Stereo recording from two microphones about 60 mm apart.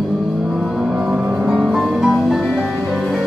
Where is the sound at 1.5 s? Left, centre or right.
Centre.